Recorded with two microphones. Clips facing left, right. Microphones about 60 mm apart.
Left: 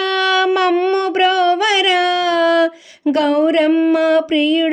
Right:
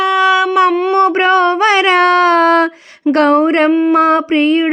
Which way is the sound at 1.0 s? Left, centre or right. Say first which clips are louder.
Right 4 dB; right.